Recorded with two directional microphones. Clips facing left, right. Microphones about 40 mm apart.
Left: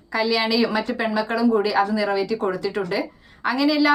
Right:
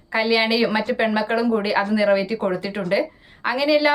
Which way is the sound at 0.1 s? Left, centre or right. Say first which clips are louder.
Right 2 dB; right.